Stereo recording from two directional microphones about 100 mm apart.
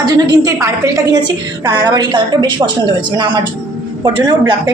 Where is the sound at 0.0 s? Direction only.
40° right (ahead or behind).